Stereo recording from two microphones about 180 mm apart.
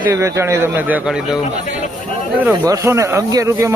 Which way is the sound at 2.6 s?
15° right (ahead or behind).